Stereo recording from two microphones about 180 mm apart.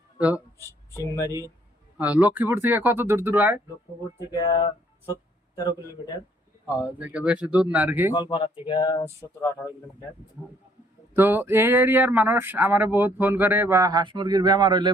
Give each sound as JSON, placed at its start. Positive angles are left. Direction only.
{"t": 0.2, "sound": "speech", "side_deg": -5}
{"t": 2.0, "sound": "speech", "side_deg": -10}
{"t": 4.3, "sound": "speech", "side_deg": 25}
{"t": 6.7, "sound": "speech", "side_deg": -10}
{"t": 8.1, "sound": "speech", "side_deg": 30}
{"t": 9.2, "sound": "speech", "side_deg": 10}
{"t": 11.1, "sound": "speech", "side_deg": -10}